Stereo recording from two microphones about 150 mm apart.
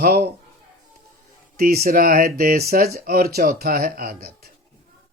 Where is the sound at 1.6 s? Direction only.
90° right.